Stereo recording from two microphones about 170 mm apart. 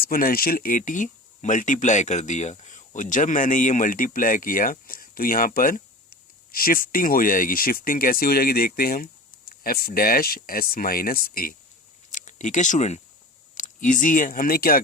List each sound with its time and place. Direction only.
0.0 s speech: 55° left (ahead or behind)
12.1 s speech: 45° left (ahead or behind)